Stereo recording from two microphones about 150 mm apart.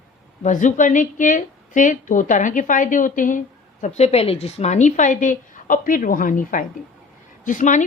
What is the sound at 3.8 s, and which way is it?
Speech, 50° left (ahead or behind).